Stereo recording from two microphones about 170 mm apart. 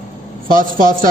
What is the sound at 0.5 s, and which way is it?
Speech, 55° right (ahead or behind).